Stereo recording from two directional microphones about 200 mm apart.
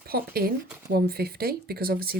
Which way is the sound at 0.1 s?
50° right (ahead or behind).